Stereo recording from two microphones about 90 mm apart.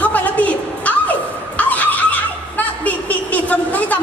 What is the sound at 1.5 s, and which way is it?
Neigh, 15° left (ahead or behind).